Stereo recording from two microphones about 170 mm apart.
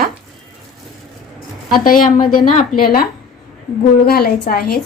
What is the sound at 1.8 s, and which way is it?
A woman's voice, 55° left (ahead or behind).